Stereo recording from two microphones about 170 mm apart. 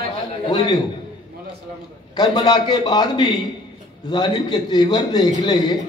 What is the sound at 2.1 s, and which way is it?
A man's voice, 25° left (ahead or behind).